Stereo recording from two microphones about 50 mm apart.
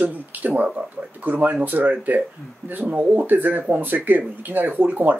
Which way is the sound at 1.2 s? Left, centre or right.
Right.